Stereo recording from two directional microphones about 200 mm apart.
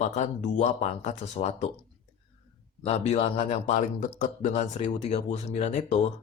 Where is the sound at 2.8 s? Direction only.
30° left (ahead or behind).